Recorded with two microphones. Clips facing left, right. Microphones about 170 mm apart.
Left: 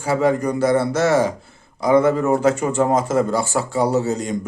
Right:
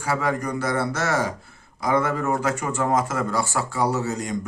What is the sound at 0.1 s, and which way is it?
A man's voice, 25° left (ahead or behind).